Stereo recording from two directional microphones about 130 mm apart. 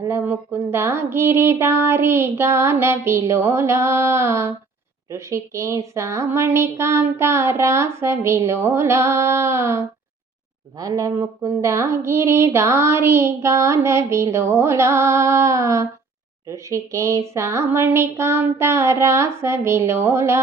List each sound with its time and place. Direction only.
0.0 s a woman's voice: 20° right (ahead or behind)